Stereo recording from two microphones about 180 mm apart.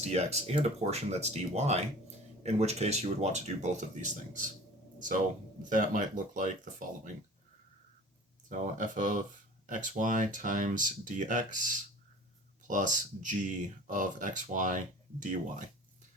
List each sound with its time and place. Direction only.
0.0 s speech: 35° right (ahead or behind)
8.4 s speech: 45° right (ahead or behind)